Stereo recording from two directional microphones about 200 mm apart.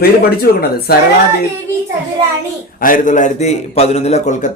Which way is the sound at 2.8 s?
40° left (ahead or behind).